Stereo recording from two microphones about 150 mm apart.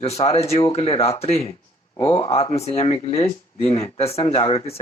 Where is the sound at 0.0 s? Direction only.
45° left (ahead or behind).